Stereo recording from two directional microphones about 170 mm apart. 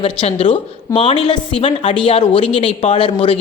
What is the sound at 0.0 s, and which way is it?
Speech, 35° left (ahead or behind).